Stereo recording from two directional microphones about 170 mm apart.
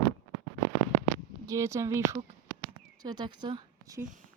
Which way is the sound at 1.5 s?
15° right (ahead or behind).